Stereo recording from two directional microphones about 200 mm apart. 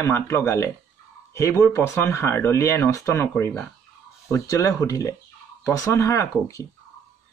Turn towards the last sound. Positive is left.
turn(degrees=15)  # may be behind; listen again after turning